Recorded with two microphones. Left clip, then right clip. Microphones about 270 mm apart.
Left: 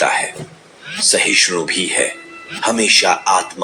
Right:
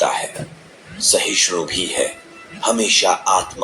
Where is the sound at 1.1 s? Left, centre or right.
Left.